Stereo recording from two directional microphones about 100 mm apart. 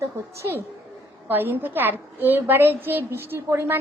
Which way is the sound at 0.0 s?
25° right (ahead or behind).